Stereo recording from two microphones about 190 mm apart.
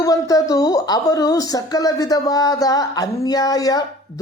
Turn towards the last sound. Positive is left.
turn(degrees=20)  # may be behind; listen again after turning